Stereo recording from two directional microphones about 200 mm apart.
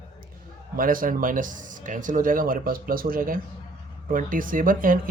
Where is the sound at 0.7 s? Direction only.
45° right (ahead or behind).